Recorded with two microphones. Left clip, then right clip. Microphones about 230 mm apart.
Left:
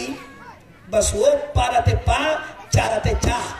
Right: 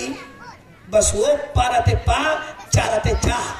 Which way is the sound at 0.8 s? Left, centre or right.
Centre.